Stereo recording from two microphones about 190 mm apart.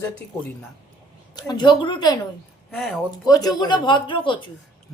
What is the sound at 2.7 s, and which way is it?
Speech, centre (ahead or behind).